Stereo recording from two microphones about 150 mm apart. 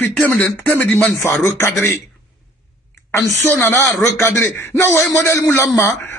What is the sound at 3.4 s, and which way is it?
A man's voice, 15° left (ahead or behind).